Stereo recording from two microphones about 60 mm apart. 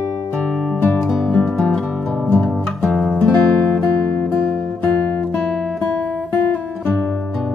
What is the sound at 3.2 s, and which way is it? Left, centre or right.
Music, left.